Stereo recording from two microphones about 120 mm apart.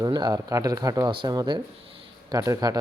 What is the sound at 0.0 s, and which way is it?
Speech, 35° right (ahead or behind).